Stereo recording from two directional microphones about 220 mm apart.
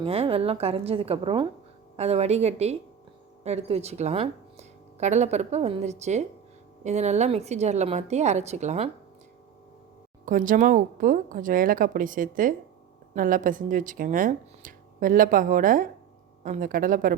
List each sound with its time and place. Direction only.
0.0 s a woman's voice: 25° right (ahead or behind)
10.2 s speech: 35° right (ahead or behind)